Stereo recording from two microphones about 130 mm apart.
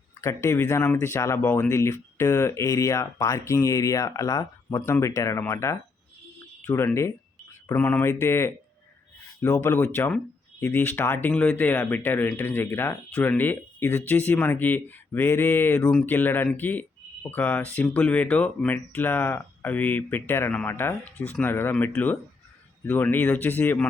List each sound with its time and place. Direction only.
0.2 s speech: 20° left (ahead or behind)